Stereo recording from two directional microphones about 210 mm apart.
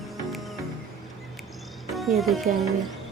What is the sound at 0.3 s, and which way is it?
Music, centre (ahead or behind).